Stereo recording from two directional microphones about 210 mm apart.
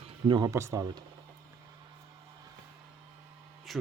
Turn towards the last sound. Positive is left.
turn(degrees=0)  # may be behind; listen again after turning